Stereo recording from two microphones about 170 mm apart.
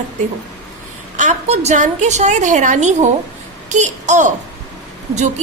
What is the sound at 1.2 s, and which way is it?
A woman's voice, 45° right (ahead or behind).